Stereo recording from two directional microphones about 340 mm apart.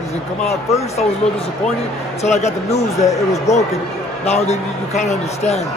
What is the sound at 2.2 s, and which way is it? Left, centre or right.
Speech, centre.